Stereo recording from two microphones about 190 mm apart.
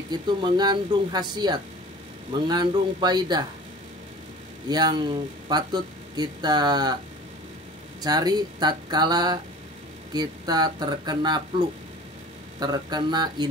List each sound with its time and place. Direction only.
0.1 s speech: 20° right (ahead or behind)
4.6 s speech: 20° right (ahead or behind)
8.0 s speech: 20° right (ahead or behind)
12.5 s speech: 20° right (ahead or behind)